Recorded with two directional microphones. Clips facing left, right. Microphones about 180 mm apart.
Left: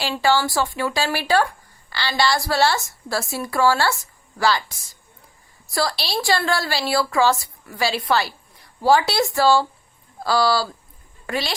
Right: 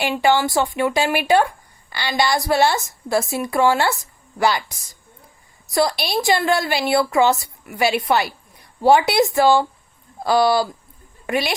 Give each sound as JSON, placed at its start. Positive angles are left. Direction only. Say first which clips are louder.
{"t": 0.0, "sound": "a woman's voice", "louder": "right 2 dB", "side_deg": -20}